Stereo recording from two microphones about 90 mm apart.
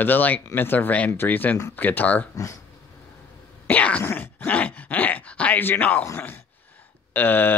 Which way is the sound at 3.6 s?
15° left (ahead or behind).